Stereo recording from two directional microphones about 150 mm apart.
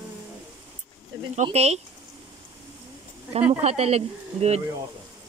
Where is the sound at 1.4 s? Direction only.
45° right (ahead or behind).